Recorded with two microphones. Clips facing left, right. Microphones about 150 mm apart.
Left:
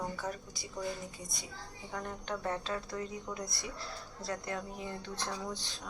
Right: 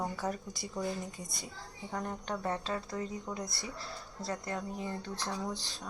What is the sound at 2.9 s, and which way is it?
Speech, 25° right (ahead or behind).